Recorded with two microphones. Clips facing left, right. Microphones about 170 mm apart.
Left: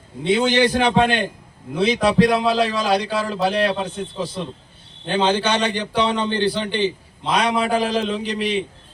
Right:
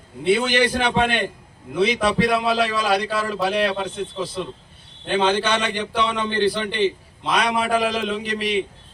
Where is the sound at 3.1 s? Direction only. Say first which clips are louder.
Left 1 dB; 30° left (ahead or behind).